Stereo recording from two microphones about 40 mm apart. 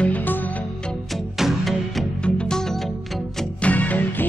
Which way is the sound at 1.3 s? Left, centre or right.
Centre.